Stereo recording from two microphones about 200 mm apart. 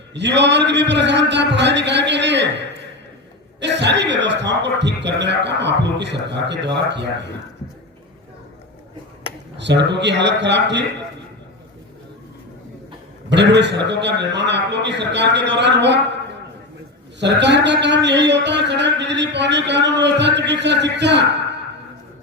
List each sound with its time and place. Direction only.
0.1 s a man's voice: 60° right (ahead or behind)
9.6 s a man's voice: 60° right (ahead or behind)
13.3 s a man's voice: 60° right (ahead or behind)
17.2 s a man's voice: 60° right (ahead or behind)